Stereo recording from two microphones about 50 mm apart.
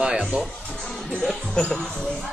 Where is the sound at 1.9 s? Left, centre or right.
Centre.